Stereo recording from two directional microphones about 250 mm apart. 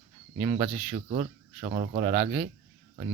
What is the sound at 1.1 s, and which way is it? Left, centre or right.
Speech, right.